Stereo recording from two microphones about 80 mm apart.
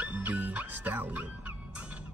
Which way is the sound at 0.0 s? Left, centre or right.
Centre.